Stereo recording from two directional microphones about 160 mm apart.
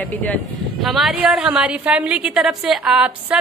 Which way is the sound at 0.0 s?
10° left (ahead or behind).